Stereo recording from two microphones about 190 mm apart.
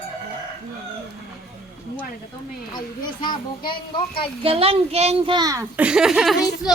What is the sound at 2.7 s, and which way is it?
A child's voice, 25° left (ahead or behind).